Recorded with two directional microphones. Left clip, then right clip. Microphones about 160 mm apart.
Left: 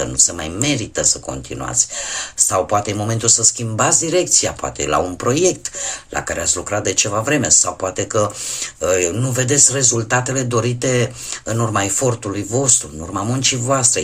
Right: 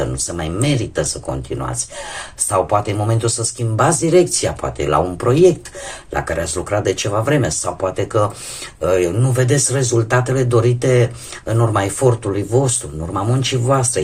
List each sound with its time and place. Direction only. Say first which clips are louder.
0.0 s speech: left 3 dB; 20° left (ahead or behind)
3.8 s speech: right 4 dB; 10° left (ahead or behind)
6.1 s speech: right 1 dB; 15° left (ahead or behind)